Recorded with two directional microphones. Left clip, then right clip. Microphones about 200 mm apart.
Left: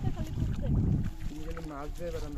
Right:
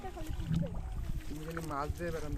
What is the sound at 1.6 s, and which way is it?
Speech, 45° right (ahead or behind).